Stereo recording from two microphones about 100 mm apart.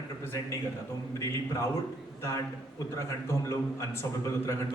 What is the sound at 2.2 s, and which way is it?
A man's voice, 25° left (ahead or behind).